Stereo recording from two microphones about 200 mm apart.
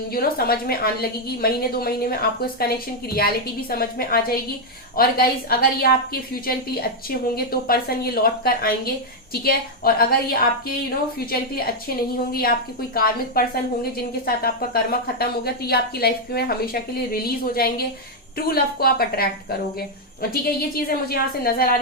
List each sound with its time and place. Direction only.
0.1 s a woman's voice: 50° left (ahead or behind)